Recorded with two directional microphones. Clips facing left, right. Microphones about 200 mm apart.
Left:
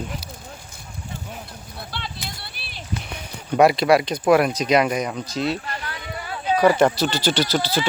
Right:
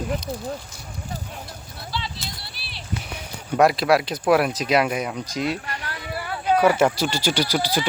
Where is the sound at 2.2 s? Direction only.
55° left (ahead or behind).